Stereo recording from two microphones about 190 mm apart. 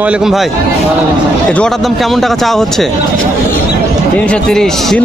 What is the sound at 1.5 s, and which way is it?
A man's voice, 5° left (ahead or behind).